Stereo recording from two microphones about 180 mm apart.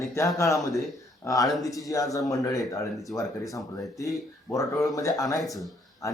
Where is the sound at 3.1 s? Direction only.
5° left (ahead or behind).